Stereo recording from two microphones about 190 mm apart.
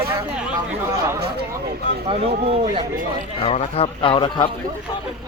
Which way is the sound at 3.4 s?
35° left (ahead or behind).